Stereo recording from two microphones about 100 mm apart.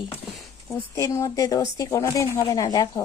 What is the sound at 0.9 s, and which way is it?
Speech, 30° left (ahead or behind).